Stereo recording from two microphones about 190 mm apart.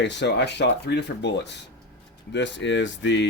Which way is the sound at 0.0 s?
65° left (ahead or behind).